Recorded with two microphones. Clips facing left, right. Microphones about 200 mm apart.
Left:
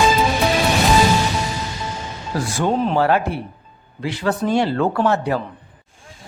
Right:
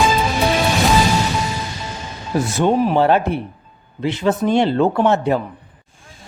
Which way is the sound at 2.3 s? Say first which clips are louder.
Right 4 dB; 20° right (ahead or behind).